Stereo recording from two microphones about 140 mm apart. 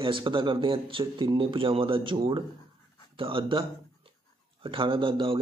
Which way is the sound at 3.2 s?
40° right (ahead or behind).